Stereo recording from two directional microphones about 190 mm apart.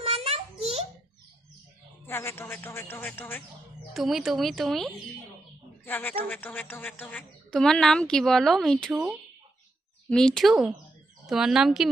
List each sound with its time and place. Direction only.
0.0 s a sound: 30° right (ahead or behind)
2.0 s a woman's voice: 10° left (ahead or behind)
3.9 s a woman's voice: centre (ahead or behind)